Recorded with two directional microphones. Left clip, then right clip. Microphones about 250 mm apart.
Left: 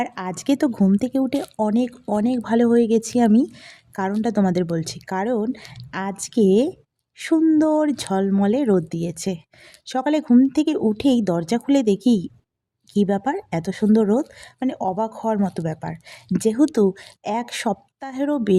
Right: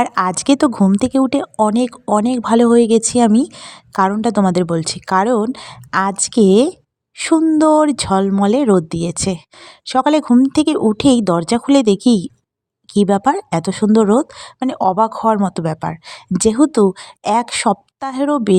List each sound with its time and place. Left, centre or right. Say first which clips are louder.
0.0 s speech: right 10 dB; right